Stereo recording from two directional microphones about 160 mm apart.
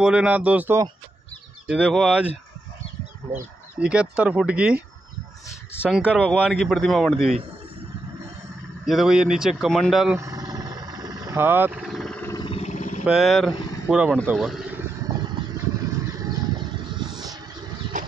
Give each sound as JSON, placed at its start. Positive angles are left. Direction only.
{"t": 0.0, "sound": "speech", "side_deg": -5}
{"t": 3.8, "sound": "speech", "side_deg": -5}
{"t": 5.9, "sound": "speech", "side_deg": -5}
{"t": 8.8, "sound": "speech", "side_deg": 0}
{"t": 10.1, "sound": "vehicle", "side_deg": -20}
{"t": 12.2, "sound": "a sound", "side_deg": 20}
{"t": 12.4, "sound": "a sound", "side_deg": 40}
{"t": 13.0, "sound": "speech", "side_deg": -5}
{"t": 15.0, "sound": "vehicle", "side_deg": -30}
{"t": 16.1, "sound": "a sound", "side_deg": -25}
{"t": 17.9, "sound": "horse", "side_deg": -50}